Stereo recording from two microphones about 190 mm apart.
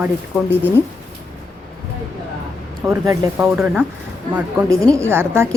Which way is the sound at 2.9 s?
15° right (ahead or behind).